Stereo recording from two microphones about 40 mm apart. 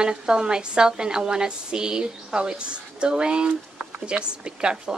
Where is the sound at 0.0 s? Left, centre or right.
Centre.